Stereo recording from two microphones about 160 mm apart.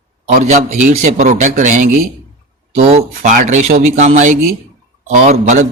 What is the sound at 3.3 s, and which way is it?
Speech, 55° right (ahead or behind).